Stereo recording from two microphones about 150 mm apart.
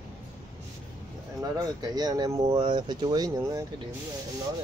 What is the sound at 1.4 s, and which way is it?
Speech, 25° right (ahead or behind).